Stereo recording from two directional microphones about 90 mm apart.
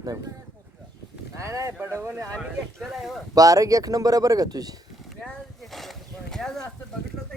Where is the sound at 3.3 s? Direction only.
40° right (ahead or behind).